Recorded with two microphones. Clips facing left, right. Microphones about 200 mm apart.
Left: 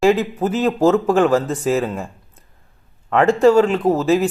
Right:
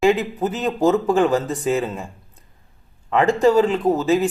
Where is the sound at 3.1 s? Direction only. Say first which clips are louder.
Left 3 dB; centre (ahead or behind).